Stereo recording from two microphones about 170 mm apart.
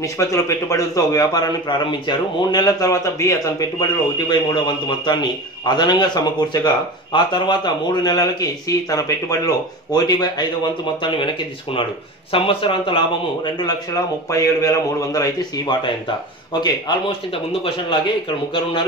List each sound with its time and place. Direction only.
0.0 s a man's voice: 20° left (ahead or behind)
12.3 s a man's voice: 30° left (ahead or behind)